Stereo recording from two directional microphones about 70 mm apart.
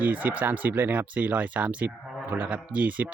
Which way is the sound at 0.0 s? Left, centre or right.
Right.